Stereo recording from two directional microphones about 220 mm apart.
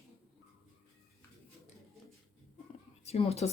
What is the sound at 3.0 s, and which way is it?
Speech, 30° left (ahead or behind).